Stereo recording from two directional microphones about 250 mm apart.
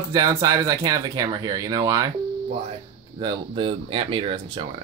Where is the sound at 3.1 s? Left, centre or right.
Centre.